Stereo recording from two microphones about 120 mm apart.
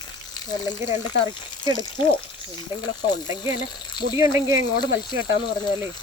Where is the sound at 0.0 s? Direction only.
35° left (ahead or behind).